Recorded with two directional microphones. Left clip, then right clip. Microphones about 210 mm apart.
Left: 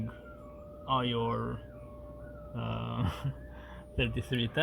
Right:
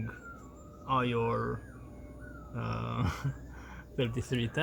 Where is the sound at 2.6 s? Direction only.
15° left (ahead or behind).